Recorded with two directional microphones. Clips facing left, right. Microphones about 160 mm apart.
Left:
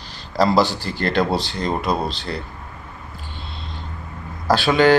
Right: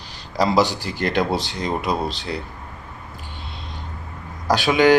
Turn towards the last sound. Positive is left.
turn(degrees=-15)  # may be behind; listen again after turning